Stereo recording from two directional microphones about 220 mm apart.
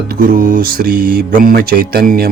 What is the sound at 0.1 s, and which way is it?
Mantra, 40° right (ahead or behind).